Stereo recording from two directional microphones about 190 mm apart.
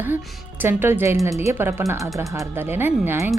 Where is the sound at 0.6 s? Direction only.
10° right (ahead or behind).